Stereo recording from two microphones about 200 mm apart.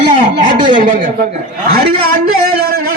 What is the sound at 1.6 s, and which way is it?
A man's voice, 50° right (ahead or behind).